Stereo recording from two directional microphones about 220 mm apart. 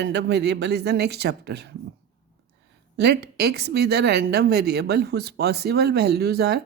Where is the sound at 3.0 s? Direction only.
50° right (ahead or behind).